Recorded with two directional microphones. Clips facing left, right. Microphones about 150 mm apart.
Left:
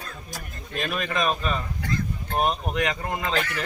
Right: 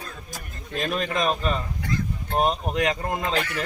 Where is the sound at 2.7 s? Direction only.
35° right (ahead or behind).